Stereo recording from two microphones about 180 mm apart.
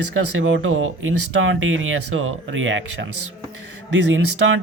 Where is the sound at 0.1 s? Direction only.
90° right.